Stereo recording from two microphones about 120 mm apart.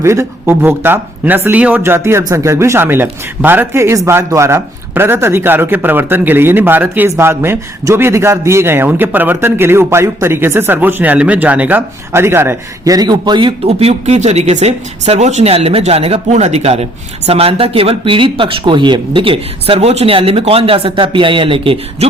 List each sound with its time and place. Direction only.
0.0 s speech: 25° right (ahead or behind); by 13.5 s 40° right (ahead or behind)
13.7 s speech: 60° right (ahead or behind)